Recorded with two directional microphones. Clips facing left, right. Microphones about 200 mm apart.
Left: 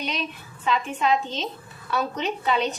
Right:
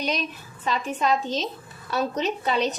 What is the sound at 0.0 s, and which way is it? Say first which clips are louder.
A woman's voice: right 3 dB; 40° right (ahead or behind).